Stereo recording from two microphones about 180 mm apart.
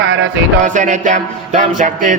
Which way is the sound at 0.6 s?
45° right (ahead or behind).